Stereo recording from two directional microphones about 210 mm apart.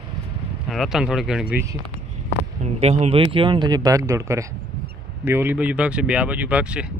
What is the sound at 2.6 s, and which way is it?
Speech, 30° right (ahead or behind).